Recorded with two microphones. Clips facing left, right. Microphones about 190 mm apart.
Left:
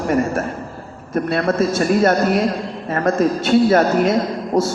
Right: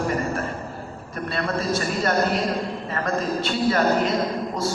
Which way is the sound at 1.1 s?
45° left (ahead or behind).